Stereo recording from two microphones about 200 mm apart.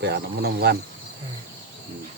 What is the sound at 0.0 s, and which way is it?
Speech, 55° right (ahead or behind).